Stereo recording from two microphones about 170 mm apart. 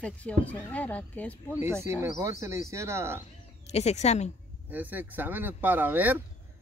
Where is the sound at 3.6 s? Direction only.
40° left (ahead or behind).